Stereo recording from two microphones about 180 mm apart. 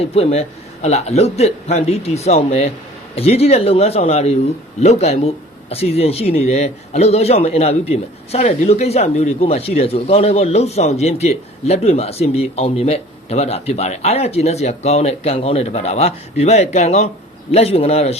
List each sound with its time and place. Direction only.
0.0 s speech: 35° left (ahead or behind)